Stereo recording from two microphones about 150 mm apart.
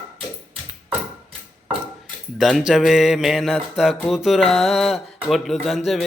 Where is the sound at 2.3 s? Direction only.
Centre (ahead or behind).